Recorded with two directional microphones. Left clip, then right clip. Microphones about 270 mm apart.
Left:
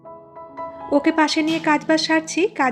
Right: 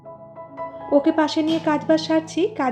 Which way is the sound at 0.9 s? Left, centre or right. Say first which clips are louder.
Left 1 dB; left.